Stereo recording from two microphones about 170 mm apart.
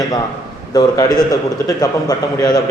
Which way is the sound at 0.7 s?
20° left (ahead or behind).